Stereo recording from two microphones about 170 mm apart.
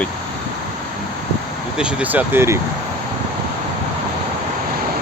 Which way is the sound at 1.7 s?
5° right (ahead or behind).